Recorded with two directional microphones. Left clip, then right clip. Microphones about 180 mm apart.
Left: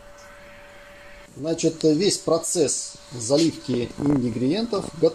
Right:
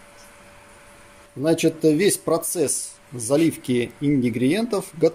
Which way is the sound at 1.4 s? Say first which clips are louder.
Right 3 dB; 10° right (ahead or behind).